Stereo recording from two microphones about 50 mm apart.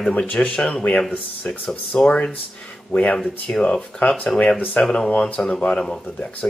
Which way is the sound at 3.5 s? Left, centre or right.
Centre.